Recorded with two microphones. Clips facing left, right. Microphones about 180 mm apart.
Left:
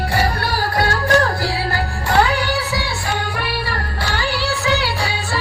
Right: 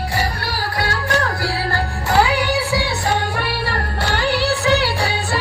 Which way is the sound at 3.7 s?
55° right (ahead or behind).